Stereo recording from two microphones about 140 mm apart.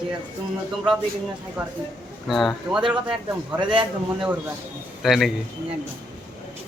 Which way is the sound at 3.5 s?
35° right (ahead or behind).